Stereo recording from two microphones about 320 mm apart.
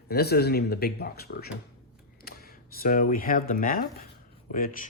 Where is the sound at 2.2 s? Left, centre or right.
Left.